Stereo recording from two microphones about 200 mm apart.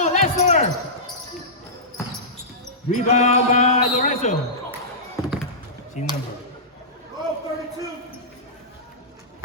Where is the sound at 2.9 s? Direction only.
35° left (ahead or behind).